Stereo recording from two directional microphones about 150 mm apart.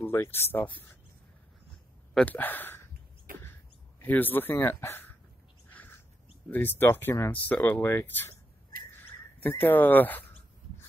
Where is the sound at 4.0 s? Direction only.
10° left (ahead or behind).